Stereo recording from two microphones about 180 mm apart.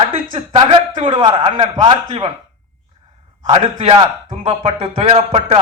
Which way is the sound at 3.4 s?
30° right (ahead or behind).